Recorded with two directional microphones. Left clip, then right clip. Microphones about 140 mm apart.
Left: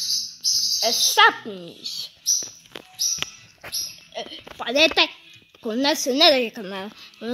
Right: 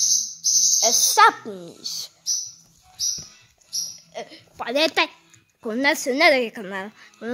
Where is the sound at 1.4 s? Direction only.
25° right (ahead or behind).